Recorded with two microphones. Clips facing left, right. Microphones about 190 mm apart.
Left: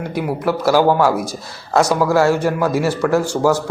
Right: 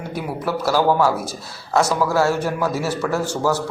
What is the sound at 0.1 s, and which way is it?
A man's voice, 10° left (ahead or behind).